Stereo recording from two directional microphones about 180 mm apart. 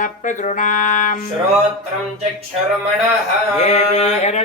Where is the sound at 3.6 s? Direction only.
40° left (ahead or behind).